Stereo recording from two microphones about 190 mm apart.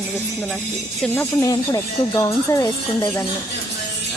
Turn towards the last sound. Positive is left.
turn(degrees=20)  # may be behind; listen again after turning